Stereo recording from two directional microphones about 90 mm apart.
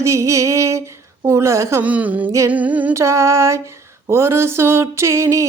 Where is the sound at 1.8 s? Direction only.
15° right (ahead or behind).